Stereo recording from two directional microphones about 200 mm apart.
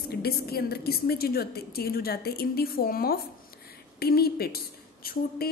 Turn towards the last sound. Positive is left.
turn(degrees=50)  # may be behind; listen again after turning